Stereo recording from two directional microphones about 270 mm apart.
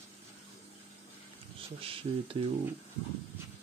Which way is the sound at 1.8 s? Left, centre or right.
Centre.